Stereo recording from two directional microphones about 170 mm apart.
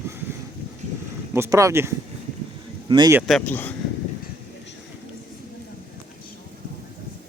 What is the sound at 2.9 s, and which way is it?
Speech, 25° right (ahead or behind).